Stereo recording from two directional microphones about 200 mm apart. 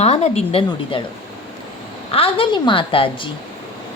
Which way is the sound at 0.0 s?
30° left (ahead or behind).